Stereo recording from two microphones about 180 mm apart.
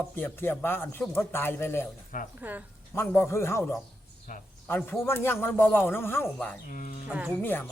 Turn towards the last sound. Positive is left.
turn(degrees=-5)  # may be behind; listen again after turning